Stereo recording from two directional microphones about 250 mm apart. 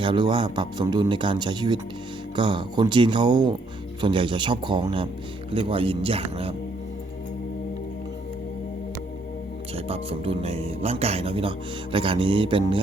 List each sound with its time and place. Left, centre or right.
0.0 s speech: centre
9.7 s speech: right